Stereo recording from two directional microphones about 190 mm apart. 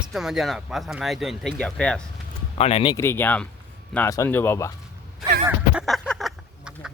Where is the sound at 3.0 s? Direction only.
10° left (ahead or behind).